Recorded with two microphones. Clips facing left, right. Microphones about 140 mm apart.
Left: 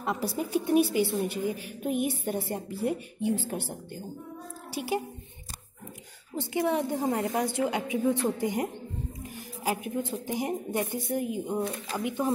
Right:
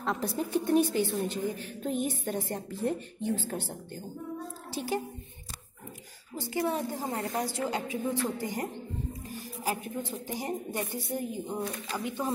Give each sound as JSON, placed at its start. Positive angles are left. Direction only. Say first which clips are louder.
{"t": 0.0, "sound": "a woman's voice", "louder": "left 1 dB", "side_deg": 5}
{"t": 6.3, "sound": "a woman's voice", "louder": "left 3 dB", "side_deg": 20}
{"t": 9.3, "sound": "a sound", "louder": "left 3 dB", "side_deg": 15}
{"t": 10.2, "sound": "a woman's voice", "louder": "left 4 dB", "side_deg": 15}
{"t": 11.6, "sound": "a woman's voice", "louder": "left 2 dB", "side_deg": 25}